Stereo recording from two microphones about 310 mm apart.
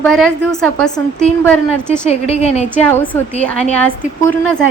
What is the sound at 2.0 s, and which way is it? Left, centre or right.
Speech, left.